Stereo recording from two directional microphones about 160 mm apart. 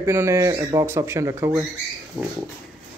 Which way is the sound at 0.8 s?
15° right (ahead or behind).